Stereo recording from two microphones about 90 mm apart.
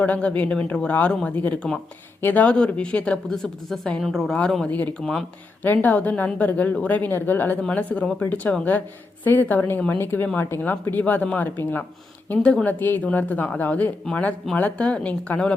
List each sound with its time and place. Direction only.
0.0 s a woman's voice: 15° left (ahead or behind)
12.3 s a woman's voice: 10° left (ahead or behind)
12.6 s a woman's voice: 20° left (ahead or behind)